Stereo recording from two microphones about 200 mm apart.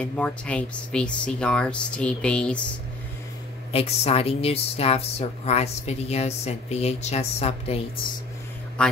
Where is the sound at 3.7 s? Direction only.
30° left (ahead or behind).